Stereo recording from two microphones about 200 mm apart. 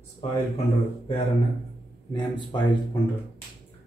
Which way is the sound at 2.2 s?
20° left (ahead or behind).